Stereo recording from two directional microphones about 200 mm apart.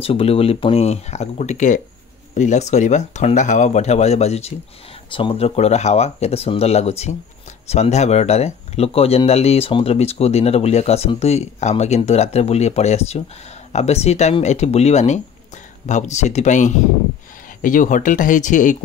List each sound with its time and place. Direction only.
0.0 s speech: 30° left (ahead or behind)